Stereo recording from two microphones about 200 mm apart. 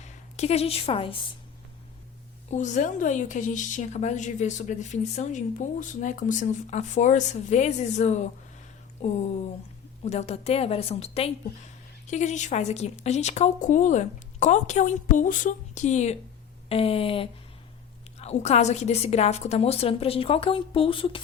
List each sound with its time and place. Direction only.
0.0 s a woman's voice: 35° left (ahead or behind)
2.5 s a woman's voice: 35° left (ahead or behind)
16.6 s a sound: 30° left (ahead or behind)
18.2 s a woman's voice: 35° left (ahead or behind)